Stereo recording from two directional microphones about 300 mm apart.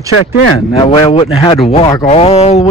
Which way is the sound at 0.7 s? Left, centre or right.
Centre.